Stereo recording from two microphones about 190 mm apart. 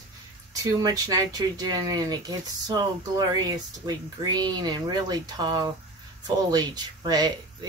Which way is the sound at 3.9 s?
20° right (ahead or behind).